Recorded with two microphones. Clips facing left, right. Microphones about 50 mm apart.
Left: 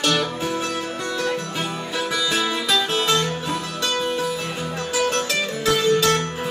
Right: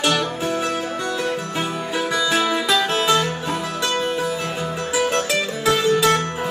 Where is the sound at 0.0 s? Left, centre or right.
Centre.